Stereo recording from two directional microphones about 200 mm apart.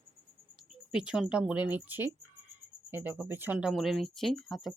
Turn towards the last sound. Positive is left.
turn(degrees=0)  # may be behind; listen again after turning